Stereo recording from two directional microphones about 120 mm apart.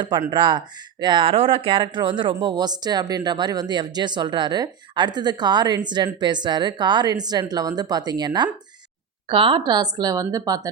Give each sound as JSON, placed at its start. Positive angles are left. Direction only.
{"t": 0.3, "sound": "speech", "side_deg": -40}
{"t": 9.3, "sound": "speech", "side_deg": -45}